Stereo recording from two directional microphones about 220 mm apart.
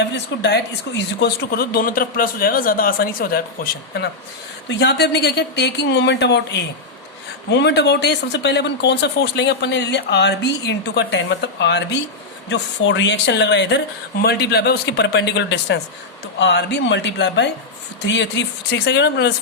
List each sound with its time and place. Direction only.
0.0 s speech: 50° left (ahead or behind)